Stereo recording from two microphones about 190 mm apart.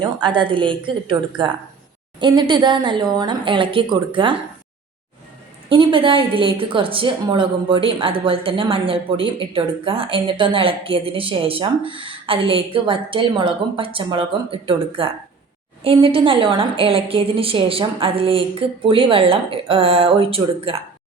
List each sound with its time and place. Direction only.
0.0 s a woman's voice: 25° right (ahead or behind)
5.6 s a woman's voice: 25° right (ahead or behind)